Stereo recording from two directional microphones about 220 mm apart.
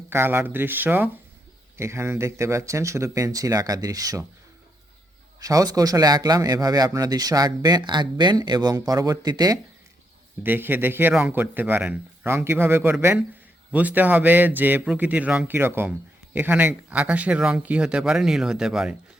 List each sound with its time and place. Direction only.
0.1 s a man's voice: 10° right (ahead or behind)
5.4 s a man's voice: 15° right (ahead or behind)